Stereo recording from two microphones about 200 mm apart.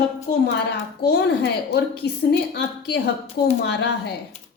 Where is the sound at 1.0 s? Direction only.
55° left (ahead or behind).